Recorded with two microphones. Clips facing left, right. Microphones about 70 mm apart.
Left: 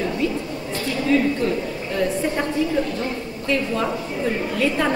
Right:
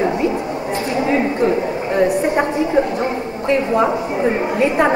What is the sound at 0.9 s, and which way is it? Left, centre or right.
A woman's voice, right.